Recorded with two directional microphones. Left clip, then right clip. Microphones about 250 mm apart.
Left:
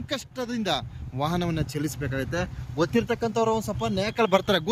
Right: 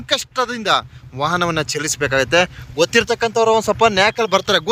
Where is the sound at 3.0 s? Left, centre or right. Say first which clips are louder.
Right 9 dB; centre.